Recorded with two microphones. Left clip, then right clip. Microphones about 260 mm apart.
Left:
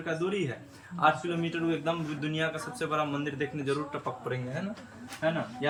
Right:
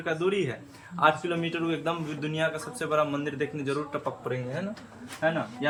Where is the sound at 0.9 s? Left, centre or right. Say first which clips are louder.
Right 2 dB; centre.